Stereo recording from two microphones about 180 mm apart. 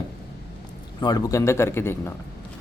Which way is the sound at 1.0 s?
20° left (ahead or behind).